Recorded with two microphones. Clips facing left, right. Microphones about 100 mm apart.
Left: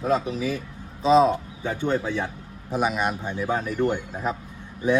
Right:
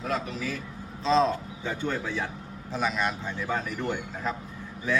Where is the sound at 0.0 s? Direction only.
20° left (ahead or behind).